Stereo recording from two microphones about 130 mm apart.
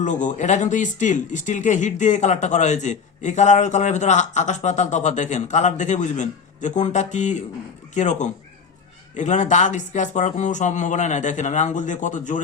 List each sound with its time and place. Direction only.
0.0 s speech: 75° left (ahead or behind)